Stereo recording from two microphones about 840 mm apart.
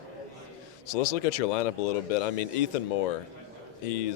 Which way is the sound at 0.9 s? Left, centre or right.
Left.